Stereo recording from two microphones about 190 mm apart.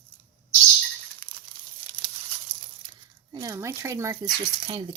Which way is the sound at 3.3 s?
20° right (ahead or behind).